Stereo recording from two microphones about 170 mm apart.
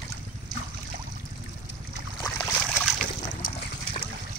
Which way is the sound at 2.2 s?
10° left (ahead or behind).